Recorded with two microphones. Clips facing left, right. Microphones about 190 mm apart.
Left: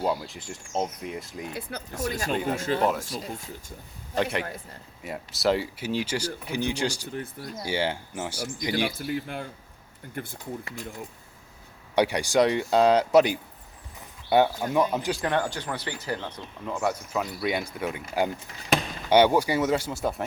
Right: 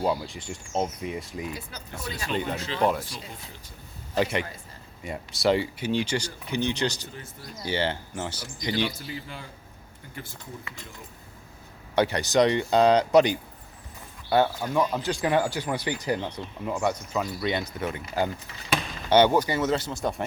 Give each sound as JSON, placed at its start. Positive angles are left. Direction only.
{"t": 0.0, "sound": "speech", "side_deg": 0}
{"t": 1.5, "sound": "speech", "side_deg": 60}
{"t": 2.0, "sound": "speech", "side_deg": 45}
{"t": 2.3, "sound": "speech", "side_deg": 5}
{"t": 2.6, "sound": "speech", "side_deg": 50}
{"t": 2.8, "sound": "speech", "side_deg": 0}
{"t": 3.2, "sound": "speech", "side_deg": 45}
{"t": 4.1, "sound": "speech", "side_deg": 0}
{"t": 8.7, "sound": "speech", "side_deg": 55}
{"t": 11.9, "sound": "speech", "side_deg": 10}
{"t": 14.3, "sound": "speech", "side_deg": 20}
{"t": 15.2, "sound": "speech", "side_deg": -10}
{"t": 16.7, "sound": "speech", "side_deg": 0}
{"t": 19.1, "sound": "speech", "side_deg": 10}